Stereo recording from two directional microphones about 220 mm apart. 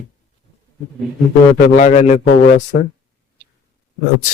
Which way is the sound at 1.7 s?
30° left (ahead or behind).